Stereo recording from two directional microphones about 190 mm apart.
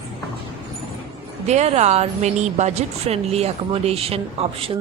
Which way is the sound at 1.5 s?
35° right (ahead or behind).